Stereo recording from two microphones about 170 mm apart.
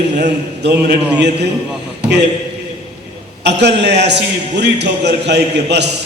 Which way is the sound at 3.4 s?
85° right.